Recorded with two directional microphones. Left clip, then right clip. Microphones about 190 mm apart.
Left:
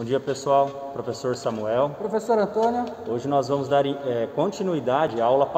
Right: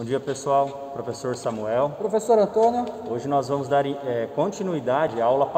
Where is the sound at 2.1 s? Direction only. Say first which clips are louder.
Right 3 dB; 20° right (ahead or behind).